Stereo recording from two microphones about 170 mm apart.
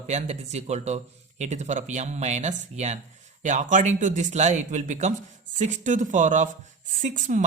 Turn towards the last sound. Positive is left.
turn(degrees=-50)  # may be behind; listen again after turning